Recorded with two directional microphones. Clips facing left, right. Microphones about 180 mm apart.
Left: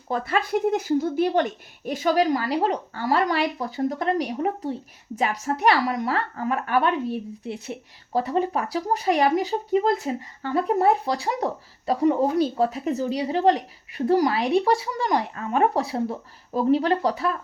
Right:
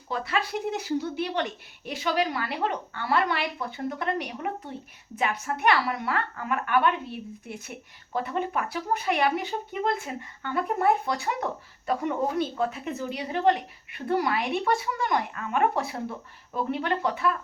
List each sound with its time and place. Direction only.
0.1 s a woman's voice: 50° left (ahead or behind)